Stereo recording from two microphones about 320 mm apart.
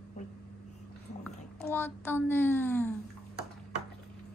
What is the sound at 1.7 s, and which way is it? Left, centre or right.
Speech, centre.